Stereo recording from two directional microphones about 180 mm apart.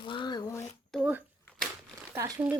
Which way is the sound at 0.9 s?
10° right (ahead or behind).